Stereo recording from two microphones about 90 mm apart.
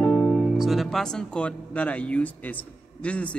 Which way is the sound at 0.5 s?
Centre (ahead or behind).